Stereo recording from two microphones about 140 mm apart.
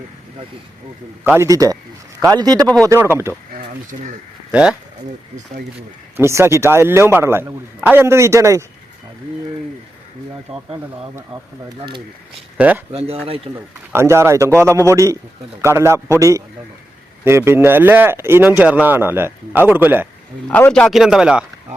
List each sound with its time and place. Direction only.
1.4 s a man's voice: 25° right (ahead or behind)
2.8 s speech: 20° right (ahead or behind)
6.1 s speech: 20° right (ahead or behind)
10.5 s speech: 45° right (ahead or behind)
12.5 s speech: 10° right (ahead or behind)
12.9 s speech: 45° right (ahead or behind)
13.9 s a man's voice: 20° right (ahead or behind)
20.5 s a man's voice: 10° left (ahead or behind)
20.9 s speech: 5° right (ahead or behind)